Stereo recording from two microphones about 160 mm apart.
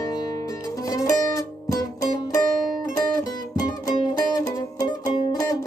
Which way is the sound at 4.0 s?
25° left (ahead or behind).